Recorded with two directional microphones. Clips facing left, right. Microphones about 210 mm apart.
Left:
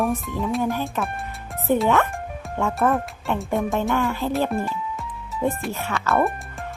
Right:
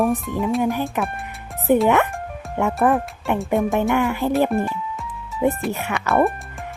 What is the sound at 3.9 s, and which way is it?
Music, 15° right (ahead or behind).